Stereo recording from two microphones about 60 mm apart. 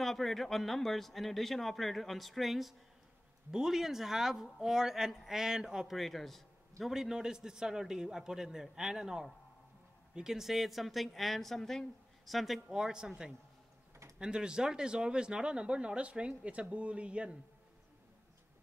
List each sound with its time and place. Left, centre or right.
0.0 s speech: centre
5.9 s speech: centre
6.8 s speech: centre